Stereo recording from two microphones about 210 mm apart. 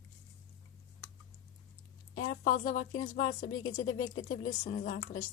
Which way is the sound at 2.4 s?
40° left (ahead or behind).